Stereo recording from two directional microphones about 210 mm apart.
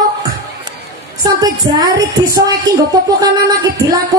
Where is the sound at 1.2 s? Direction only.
20° right (ahead or behind).